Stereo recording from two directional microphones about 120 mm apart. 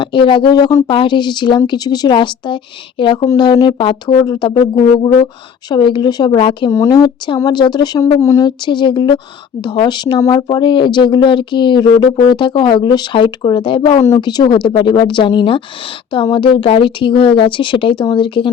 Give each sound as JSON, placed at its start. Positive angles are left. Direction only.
{"t": 0.0, "sound": "speech", "side_deg": 45}
{"t": 0.9, "sound": "speech", "side_deg": 40}
{"t": 4.7, "sound": "speech", "side_deg": 25}
{"t": 5.2, "sound": "speech", "side_deg": 40}
{"t": 6.7, "sound": "speech", "side_deg": 25}